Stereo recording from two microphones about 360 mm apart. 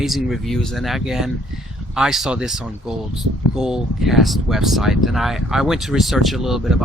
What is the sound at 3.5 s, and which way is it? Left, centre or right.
Speech, centre.